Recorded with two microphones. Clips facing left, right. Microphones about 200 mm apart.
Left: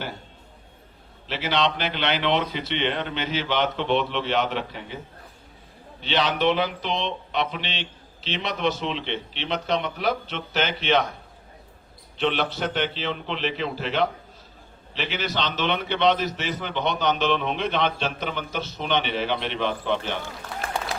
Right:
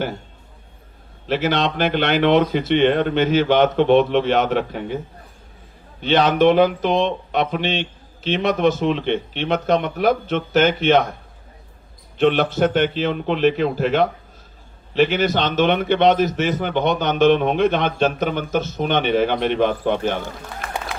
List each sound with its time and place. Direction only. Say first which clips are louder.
1.3 s a man's voice: right 5 dB; 50° right (ahead or behind)
6.0 s a man's voice: right 8 dB; 50° right (ahead or behind)
12.1 s a man's voice: right 8 dB; 50° right (ahead or behind)